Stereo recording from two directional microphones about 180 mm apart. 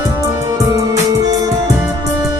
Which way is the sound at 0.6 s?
20° right (ahead or behind).